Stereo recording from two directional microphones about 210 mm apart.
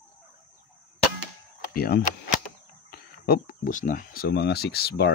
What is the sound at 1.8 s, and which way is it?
Speech, 45° left (ahead or behind).